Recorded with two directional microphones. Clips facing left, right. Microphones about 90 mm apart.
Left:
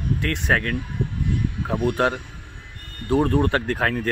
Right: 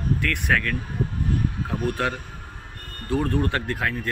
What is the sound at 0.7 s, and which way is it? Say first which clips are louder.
Speech: left 1 dB; 40° right (ahead or behind).